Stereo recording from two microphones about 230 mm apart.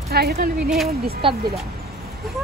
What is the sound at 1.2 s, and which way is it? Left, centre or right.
Speech, right.